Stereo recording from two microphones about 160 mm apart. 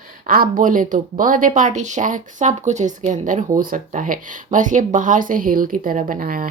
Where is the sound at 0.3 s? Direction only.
60° right (ahead or behind).